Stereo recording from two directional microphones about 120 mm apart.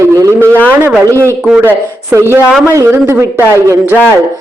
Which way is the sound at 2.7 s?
25° right (ahead or behind).